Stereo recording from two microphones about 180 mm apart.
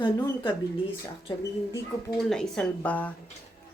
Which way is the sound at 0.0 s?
25° left (ahead or behind).